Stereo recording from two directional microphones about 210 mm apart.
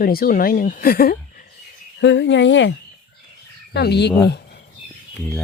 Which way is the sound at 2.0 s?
60° left (ahead or behind).